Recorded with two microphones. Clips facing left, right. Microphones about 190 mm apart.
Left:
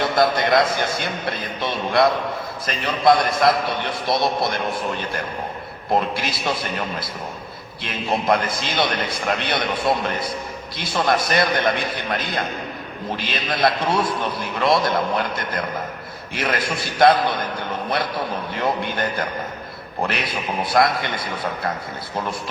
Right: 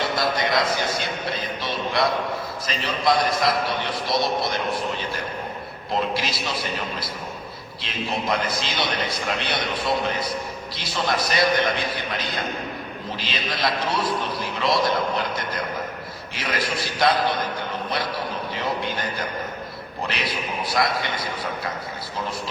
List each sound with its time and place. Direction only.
0.0 s a man's voice: 55° left (ahead or behind)
5.9 s a man's voice: 55° left (ahead or behind)
18.5 s speech: 50° left (ahead or behind)
20.1 s a man's voice: 50° left (ahead or behind)